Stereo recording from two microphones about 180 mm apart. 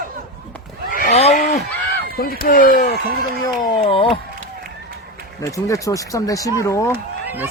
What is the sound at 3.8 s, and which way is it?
Speech, 30° left (ahead or behind).